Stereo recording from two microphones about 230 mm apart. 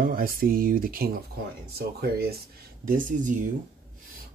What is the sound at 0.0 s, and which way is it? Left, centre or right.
Speech, right.